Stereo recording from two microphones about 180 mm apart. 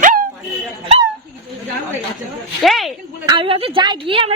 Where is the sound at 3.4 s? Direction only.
30° right (ahead or behind).